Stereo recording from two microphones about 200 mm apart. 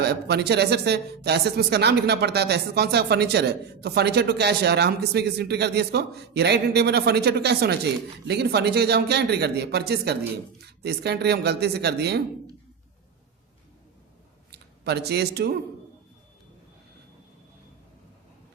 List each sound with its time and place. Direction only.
0.0 s speech: 55° right (ahead or behind)
14.5 s speech: 55° right (ahead or behind)